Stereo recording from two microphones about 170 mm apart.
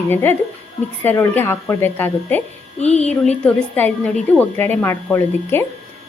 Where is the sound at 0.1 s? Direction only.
15° left (ahead or behind).